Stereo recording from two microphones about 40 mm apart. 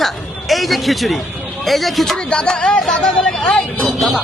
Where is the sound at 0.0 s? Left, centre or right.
Centre.